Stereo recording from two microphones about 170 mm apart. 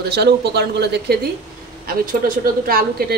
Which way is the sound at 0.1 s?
75° right (ahead or behind).